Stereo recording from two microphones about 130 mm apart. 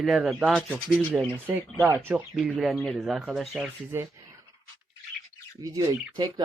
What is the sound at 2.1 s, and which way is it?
Speech, centre (ahead or behind).